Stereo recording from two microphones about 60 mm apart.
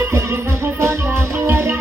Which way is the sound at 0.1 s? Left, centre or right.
Right.